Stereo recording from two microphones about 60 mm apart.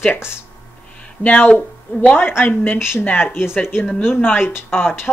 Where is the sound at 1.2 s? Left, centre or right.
Left.